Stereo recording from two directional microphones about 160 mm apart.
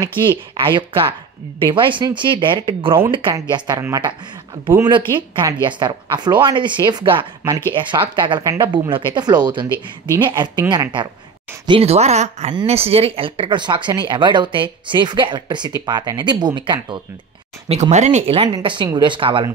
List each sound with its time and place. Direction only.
0.3 s speech: 30° right (ahead or behind)
3.3 s speech: 20° right (ahead or behind)
4.8 s speech: 30° right (ahead or behind)
17.6 s speech: 45° right (ahead or behind)